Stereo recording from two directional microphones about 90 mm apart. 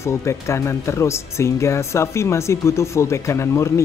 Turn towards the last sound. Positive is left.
turn(degrees=30)  # may be behind; listen again after turning